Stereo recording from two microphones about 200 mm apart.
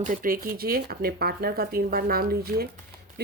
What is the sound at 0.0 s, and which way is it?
Speech, 40° right (ahead or behind).